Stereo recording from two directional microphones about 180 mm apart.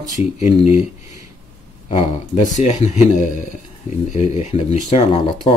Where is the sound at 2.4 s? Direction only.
45° left (ahead or behind).